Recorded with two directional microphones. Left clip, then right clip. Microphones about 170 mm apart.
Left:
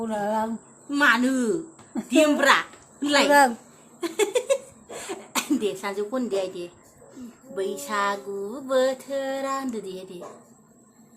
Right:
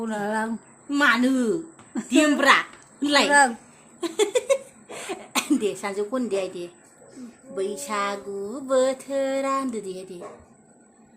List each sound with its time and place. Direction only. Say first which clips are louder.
0.0 s a sound: left 1 dB; 5° right (ahead or behind)
0.9 s child singing: even; 25° right (ahead or behind)
2.0 s speech: even; 20° right (ahead or behind)
3.2 s speech: left 1 dB; 15° left (ahead or behind)
4.0 s speech: right 1 dB; 25° right (ahead or behind)
5.8 s child singing: right 1 dB; 20° right (ahead or behind)